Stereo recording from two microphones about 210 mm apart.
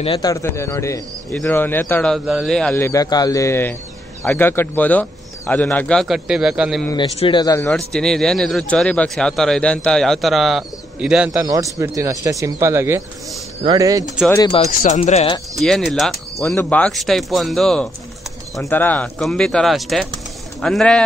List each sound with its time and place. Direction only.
0.0 s speech: 25° left (ahead or behind)
0.3 s speech: 15° left (ahead or behind); by 6.9 s 5° right (ahead or behind)
6.9 s speech: 25° left (ahead or behind)
7.7 s speech: 5° left (ahead or behind)
11.4 s speech: 15° right (ahead or behind)
14.3 s speech: 20° left (ahead or behind)
14.6 s speech: 40° left (ahead or behind)
15.6 s speech: centre (ahead or behind)